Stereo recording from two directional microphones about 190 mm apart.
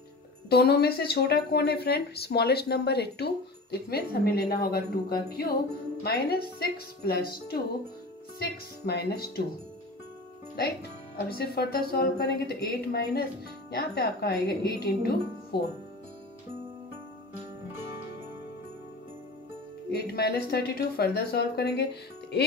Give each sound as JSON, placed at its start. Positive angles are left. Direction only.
{"t": 0.5, "sound": "speech", "side_deg": 55}
{"t": 8.8, "sound": "speech", "side_deg": 55}
{"t": 10.5, "sound": "speech", "side_deg": 60}
{"t": 19.9, "sound": "speech", "side_deg": 55}